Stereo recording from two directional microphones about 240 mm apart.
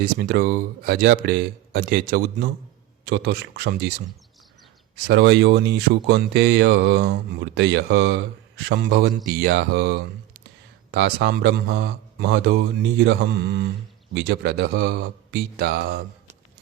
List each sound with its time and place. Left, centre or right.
0.0 s speech: right
5.0 s speech: right